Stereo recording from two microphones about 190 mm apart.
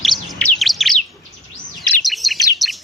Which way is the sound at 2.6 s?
Centre (ahead or behind).